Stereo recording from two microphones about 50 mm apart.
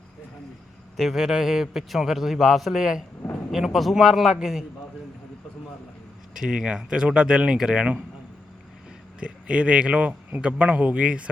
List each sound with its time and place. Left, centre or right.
0.9 s a man's voice: centre
6.3 s speech: centre
9.2 s speech: right